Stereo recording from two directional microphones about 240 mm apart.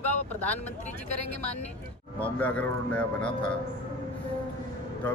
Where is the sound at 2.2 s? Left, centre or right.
Centre.